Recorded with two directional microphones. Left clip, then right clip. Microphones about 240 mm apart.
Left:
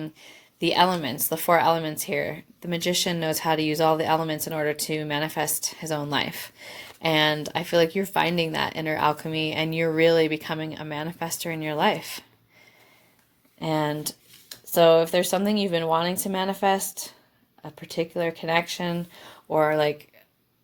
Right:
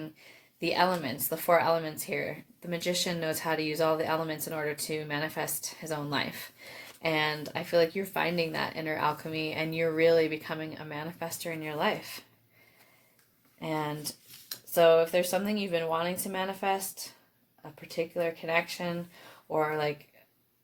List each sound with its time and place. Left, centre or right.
0.0 s a woman's voice: left
13.6 s a woman's voice: left